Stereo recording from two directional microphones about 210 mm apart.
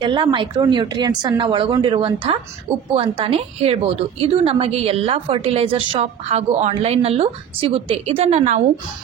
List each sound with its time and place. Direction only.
0.0 s a woman's voice: 25° right (ahead or behind)